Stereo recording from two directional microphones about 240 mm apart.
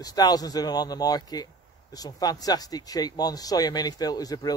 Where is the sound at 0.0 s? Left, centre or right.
Centre.